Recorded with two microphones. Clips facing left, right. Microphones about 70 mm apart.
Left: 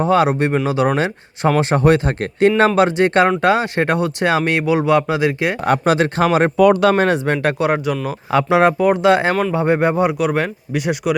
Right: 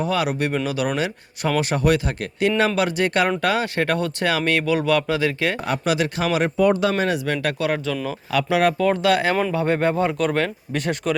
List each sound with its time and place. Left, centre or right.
0.0 s speech: left
5.6 s speech: left
6.6 s speech: left
6.8 s speech: left
7.4 s speech: left